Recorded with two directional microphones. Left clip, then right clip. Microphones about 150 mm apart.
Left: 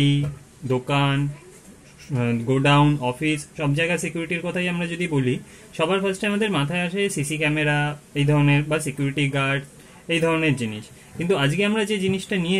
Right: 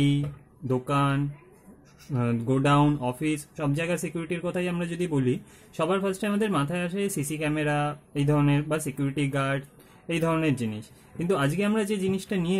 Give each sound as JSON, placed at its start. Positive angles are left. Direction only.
{"t": 0.7, "sound": "speech", "side_deg": -65}